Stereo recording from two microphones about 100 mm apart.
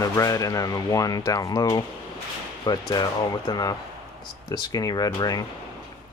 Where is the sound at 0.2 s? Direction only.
35° left (ahead or behind).